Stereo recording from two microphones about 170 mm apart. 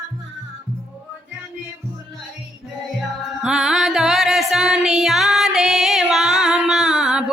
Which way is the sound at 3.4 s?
5° right (ahead or behind).